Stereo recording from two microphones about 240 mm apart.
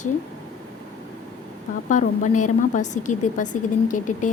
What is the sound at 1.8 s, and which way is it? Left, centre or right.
A woman's voice, left.